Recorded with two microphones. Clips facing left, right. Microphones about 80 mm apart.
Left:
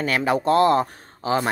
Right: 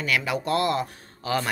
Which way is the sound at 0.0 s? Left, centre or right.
Left.